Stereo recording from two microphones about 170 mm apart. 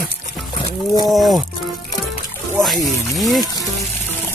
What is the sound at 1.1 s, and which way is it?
Speech, centre (ahead or behind).